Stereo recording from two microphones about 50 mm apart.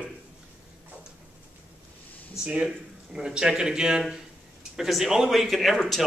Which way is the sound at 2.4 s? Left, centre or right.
Centre.